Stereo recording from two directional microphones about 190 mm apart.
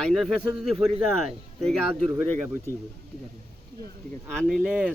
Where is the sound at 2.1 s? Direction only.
10° right (ahead or behind).